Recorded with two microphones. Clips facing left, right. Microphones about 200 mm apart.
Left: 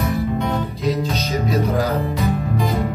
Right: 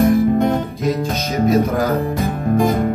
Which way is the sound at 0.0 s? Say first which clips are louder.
Right 8 dB; 50° right (ahead or behind).